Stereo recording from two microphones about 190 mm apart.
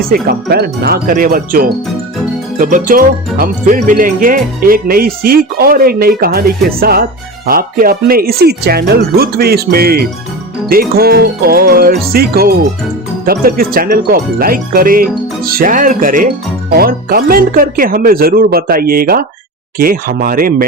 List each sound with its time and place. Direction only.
0.1 s speech: 55° right (ahead or behind)